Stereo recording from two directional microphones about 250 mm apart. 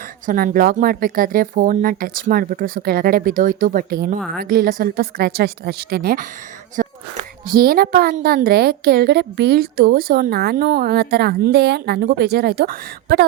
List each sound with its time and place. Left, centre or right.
0.3 s a woman's voice: right
6.8 s a sound: right
7.4 s a woman's voice: right